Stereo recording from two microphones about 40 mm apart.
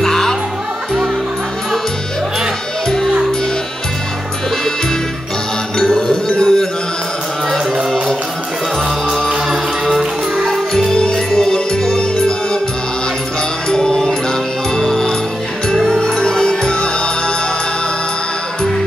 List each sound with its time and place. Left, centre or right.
0.0 s music: centre
5.8 s music: centre
6.3 s a sound: centre
10.7 s music: centre
13.7 s music: centre